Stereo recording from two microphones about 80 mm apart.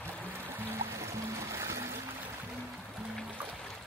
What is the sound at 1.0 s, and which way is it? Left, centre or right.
Music, right.